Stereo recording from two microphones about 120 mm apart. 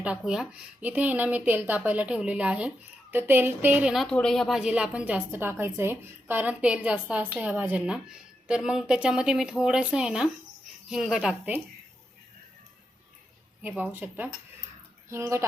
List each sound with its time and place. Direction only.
0.0 s speech: 10° right (ahead or behind)
4.1 s speech: 5° left (ahead or behind); by 11.6 s 10° right (ahead or behind)
13.6 s speech: 15° right (ahead or behind)